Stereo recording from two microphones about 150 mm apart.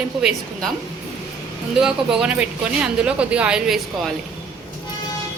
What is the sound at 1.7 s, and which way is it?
Speech, 5° right (ahead or behind).